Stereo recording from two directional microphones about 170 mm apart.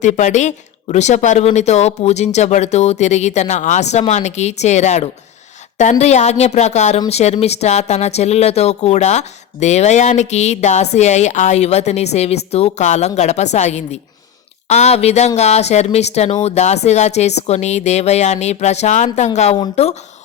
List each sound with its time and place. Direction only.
0.0 s speech: 45° left (ahead or behind)